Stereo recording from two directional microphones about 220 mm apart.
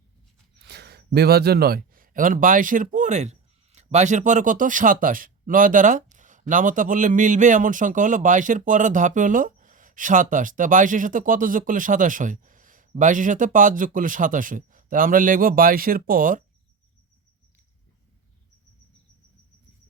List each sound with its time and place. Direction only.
0.6 s a man's voice: 50° right (ahead or behind)